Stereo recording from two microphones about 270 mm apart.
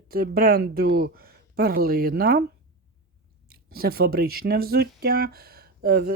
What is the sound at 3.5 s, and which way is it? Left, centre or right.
Speech, right.